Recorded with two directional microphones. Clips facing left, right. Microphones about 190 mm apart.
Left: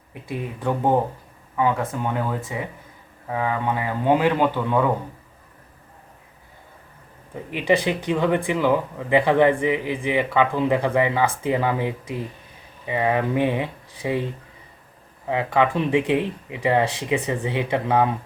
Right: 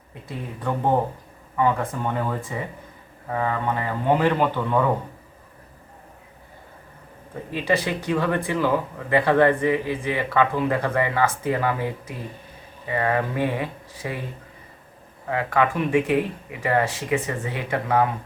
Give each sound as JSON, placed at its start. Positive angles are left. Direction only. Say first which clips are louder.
{"t": 0.1, "sound": "speech", "louder": "left 4 dB", "side_deg": 15}
{"t": 7.5, "sound": "speech", "louder": "left 3 dB", "side_deg": 15}
{"t": 15.3, "sound": "speech", "louder": "left 2 dB", "side_deg": 20}